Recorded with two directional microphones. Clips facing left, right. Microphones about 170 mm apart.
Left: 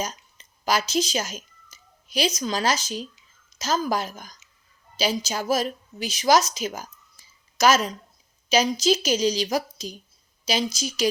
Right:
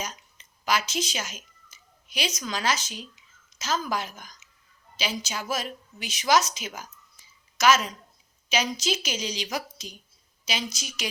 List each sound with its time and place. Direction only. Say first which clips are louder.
0.0 s a woman's voice: left 5 dB; 35° left (ahead or behind)